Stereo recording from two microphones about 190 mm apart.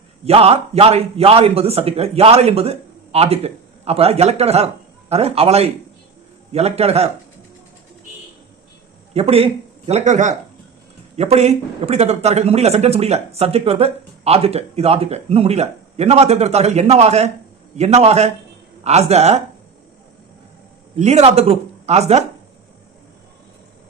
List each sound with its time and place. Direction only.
0.3 s speech: 30° right (ahead or behind)
9.1 s speech: 30° right (ahead or behind)
20.9 s speech: 35° right (ahead or behind)